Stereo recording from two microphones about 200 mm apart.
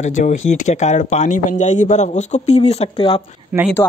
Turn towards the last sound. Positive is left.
turn(degrees=-5)  # may be behind; listen again after turning